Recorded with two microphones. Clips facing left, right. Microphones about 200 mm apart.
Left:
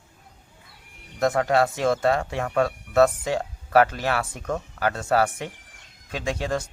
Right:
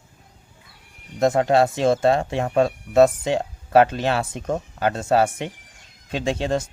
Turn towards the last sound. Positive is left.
turn(degrees=-25)  # may be behind; listen again after turning